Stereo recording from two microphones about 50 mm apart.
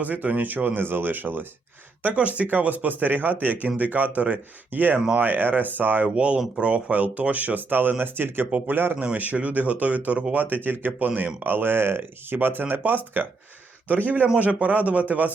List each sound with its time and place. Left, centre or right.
0.0 s speech: right
2.1 s speech: right
6.1 s speech: right
8.4 s speech: right
9.0 s speech: right
10.4 s speech: right
11.1 s speech: right
11.4 s speech: right
13.8 s a man's voice: left
14.3 s speech: right